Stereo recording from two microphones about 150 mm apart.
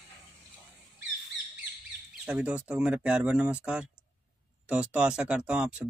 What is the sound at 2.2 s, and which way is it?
Speech, 10° right (ahead or behind).